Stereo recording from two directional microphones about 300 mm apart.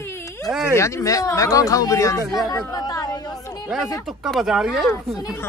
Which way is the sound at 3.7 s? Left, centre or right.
Centre.